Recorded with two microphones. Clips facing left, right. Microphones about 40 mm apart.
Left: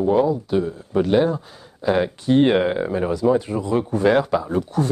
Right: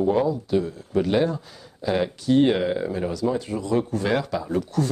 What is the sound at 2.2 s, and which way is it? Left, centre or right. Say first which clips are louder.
Speech: left 2 dB; left.